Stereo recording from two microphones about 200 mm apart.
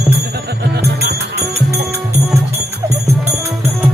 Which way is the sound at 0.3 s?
55° right (ahead or behind).